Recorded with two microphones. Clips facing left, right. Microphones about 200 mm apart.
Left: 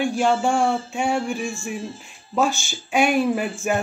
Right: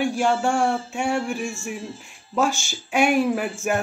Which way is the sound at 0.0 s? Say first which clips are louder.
Left 1 dB; 10° right (ahead or behind).